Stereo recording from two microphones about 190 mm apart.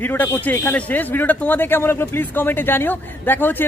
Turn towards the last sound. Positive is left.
turn(degrees=10)  # may be behind; listen again after turning